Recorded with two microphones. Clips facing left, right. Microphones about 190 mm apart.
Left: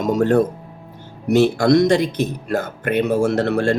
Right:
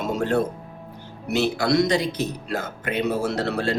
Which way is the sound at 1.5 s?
50° left (ahead or behind).